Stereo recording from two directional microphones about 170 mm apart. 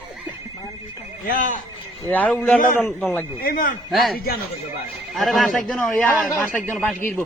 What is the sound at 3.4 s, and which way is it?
Speech, 55° left (ahead or behind).